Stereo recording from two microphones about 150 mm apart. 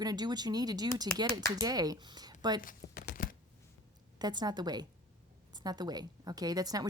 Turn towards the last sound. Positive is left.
turn(degrees=-25)  # may be behind; listen again after turning